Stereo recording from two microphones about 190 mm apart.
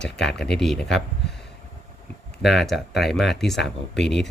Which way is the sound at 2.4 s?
Centre (ahead or behind).